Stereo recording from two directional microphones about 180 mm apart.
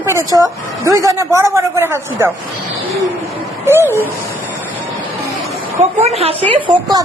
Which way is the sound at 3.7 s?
15° right (ahead or behind).